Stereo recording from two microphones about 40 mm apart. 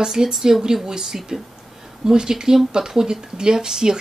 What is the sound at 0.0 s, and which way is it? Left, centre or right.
Speech, centre.